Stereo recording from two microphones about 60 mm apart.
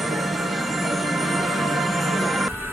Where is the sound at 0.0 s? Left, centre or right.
Centre.